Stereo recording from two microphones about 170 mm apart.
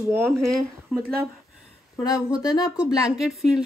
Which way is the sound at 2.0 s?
20° left (ahead or behind).